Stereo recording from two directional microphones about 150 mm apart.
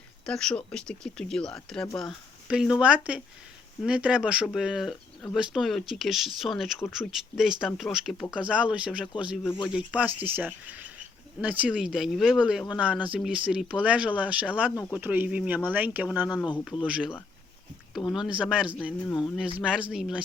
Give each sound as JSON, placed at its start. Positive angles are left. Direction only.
{"t": 0.3, "sound": "speech", "side_deg": 5}
{"t": 16.3, "sound": "speech", "side_deg": 30}
{"t": 16.8, "sound": "speech", "side_deg": -5}